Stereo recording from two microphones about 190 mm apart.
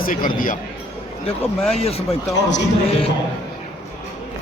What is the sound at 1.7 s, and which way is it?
Speech, 30° left (ahead or behind).